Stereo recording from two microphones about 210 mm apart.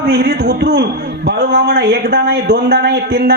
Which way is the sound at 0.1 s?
50° right (ahead or behind).